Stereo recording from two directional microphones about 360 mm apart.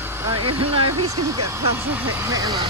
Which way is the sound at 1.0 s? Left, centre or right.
Centre.